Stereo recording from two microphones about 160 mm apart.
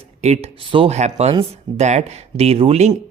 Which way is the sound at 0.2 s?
40° right (ahead or behind).